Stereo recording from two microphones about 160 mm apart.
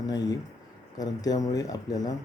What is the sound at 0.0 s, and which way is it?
Speech, 25° left (ahead or behind).